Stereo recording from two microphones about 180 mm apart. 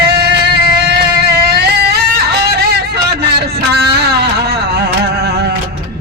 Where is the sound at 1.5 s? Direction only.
65° right (ahead or behind).